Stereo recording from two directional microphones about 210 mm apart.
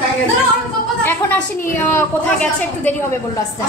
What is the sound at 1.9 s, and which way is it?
A woman's voice, 10° left (ahead or behind).